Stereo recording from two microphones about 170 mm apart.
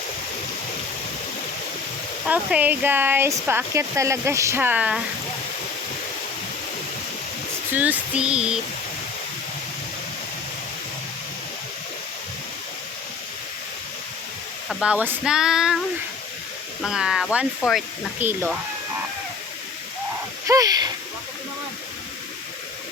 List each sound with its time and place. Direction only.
2.2 s speech: 5° right (ahead or behind)
7.7 s speech: 10° right (ahead or behind)
14.7 s speech: 5° right (ahead or behind)
16.8 s speech: 5° right (ahead or behind)
18.2 s speech: 10° right (ahead or behind)
20.5 s speech: 20° right (ahead or behind)